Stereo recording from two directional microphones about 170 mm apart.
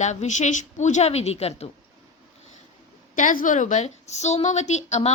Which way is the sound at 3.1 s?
50° left (ahead or behind).